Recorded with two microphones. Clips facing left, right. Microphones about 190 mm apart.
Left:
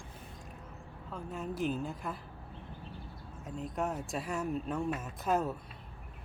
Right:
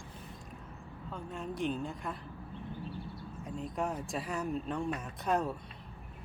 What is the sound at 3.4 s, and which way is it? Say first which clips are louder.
Speech: even; centre (ahead or behind).